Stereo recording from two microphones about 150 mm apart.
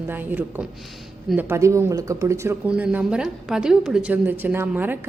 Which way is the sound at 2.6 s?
10° right (ahead or behind).